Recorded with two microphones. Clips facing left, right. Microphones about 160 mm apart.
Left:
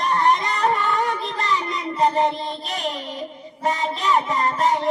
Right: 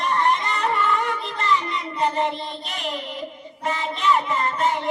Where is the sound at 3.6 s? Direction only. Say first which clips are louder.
Left 2 dB; 35° left (ahead or behind).